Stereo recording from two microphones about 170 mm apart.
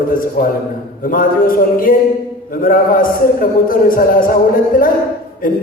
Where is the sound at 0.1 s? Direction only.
55° left (ahead or behind).